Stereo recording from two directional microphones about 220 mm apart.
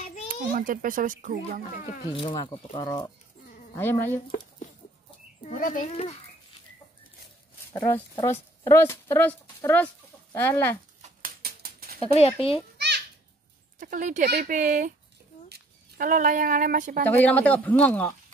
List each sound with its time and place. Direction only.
0.3 s a child's voice: 40° right (ahead or behind)
2.1 s speech: 20° left (ahead or behind)
5.4 s speech: 35° left (ahead or behind)
7.7 s speech: 10° left (ahead or behind)
11.0 s a sound: 40° right (ahead or behind)
12.0 s speech: 25° left (ahead or behind)
12.7 s babbling: 50° right (ahead or behind)
13.7 s speech: 35° right (ahead or behind)
17.2 s speech: 5° left (ahead or behind)